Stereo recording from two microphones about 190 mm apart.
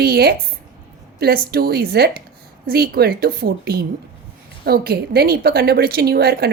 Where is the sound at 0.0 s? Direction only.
55° right (ahead or behind).